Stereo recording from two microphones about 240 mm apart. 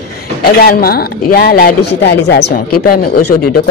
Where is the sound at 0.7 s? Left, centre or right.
Left.